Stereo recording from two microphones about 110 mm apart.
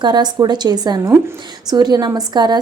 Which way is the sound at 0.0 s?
40° right (ahead or behind).